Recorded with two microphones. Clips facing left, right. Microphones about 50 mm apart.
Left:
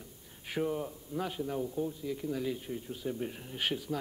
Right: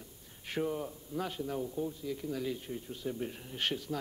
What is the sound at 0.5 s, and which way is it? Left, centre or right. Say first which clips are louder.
Speech: left 1 dB; centre.